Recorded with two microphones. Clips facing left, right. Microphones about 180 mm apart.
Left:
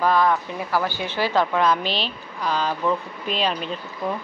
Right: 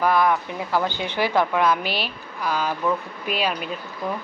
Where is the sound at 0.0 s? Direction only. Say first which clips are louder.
Even; 10° right (ahead or behind).